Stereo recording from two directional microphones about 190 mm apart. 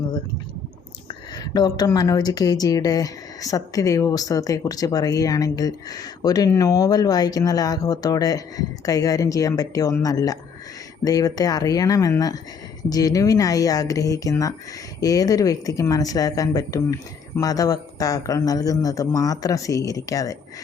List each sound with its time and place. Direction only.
1.5 s speech: 20° left (ahead or behind)